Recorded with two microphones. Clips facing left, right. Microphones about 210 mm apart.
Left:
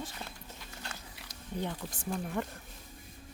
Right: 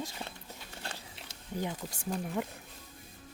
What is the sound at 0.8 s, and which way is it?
Biting, 30° right (ahead or behind).